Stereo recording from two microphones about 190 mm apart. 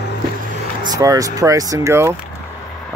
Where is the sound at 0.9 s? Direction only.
15° right (ahead or behind).